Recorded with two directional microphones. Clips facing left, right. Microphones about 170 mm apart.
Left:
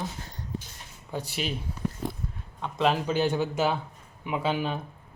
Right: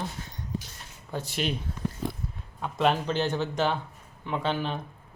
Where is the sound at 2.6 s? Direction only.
Centre (ahead or behind).